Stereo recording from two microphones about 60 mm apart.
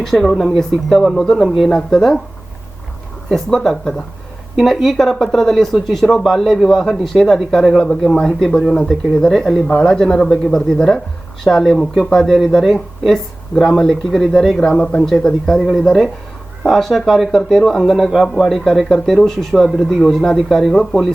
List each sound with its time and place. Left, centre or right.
0.0 s speech: centre
3.2 s speech: centre
8.1 s speech: centre